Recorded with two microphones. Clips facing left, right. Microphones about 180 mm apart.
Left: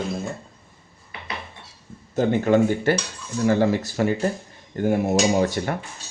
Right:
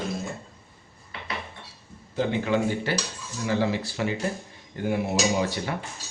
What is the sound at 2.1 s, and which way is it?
Speech, 45° left (ahead or behind).